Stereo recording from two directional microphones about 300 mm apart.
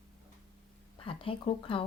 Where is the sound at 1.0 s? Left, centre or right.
Centre.